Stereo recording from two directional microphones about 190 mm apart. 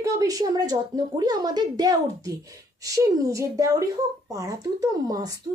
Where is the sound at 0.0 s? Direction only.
20° right (ahead or behind).